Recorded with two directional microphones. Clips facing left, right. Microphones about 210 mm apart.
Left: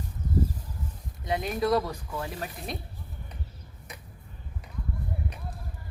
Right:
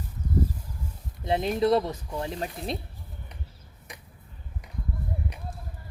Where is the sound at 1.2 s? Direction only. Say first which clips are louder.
Right 4 dB; 25° right (ahead or behind).